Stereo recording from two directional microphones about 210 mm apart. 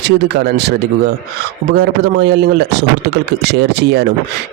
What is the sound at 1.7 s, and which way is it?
A man's voice, 50° right (ahead or behind).